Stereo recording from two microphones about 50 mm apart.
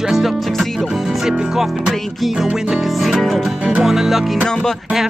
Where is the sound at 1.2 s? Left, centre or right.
Centre.